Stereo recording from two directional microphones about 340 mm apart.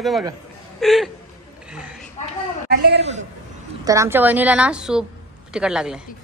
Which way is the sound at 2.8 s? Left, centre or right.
Right.